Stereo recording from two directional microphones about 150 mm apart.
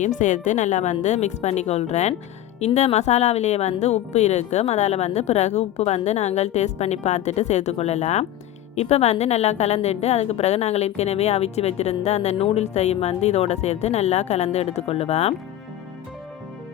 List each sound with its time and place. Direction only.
0.0 s a woman's voice: 55° left (ahead or behind)